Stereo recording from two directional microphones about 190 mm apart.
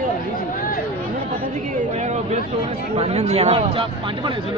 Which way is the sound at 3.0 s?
35° right (ahead or behind).